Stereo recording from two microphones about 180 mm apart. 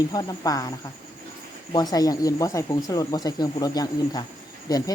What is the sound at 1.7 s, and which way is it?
Speech, 20° left (ahead or behind).